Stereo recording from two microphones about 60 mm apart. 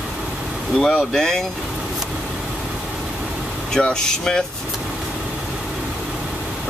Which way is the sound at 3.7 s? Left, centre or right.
Centre.